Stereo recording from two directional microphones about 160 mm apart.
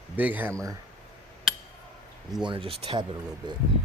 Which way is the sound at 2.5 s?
35° right (ahead or behind).